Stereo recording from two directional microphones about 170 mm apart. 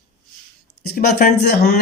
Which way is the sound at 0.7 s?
65° left (ahead or behind).